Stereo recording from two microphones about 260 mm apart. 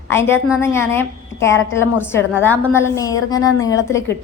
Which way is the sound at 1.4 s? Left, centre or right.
Left.